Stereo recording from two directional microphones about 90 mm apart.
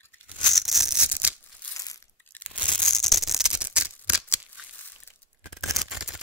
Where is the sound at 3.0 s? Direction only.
Centre (ahead or behind).